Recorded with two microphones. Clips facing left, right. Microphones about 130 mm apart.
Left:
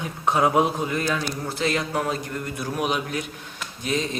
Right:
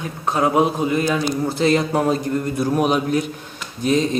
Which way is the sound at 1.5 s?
30° right (ahead or behind).